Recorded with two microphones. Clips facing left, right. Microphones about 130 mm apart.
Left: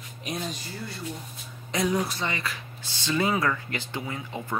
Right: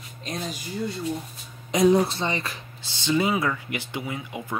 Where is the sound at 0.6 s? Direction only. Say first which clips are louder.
Right 7 dB; 20° right (ahead or behind).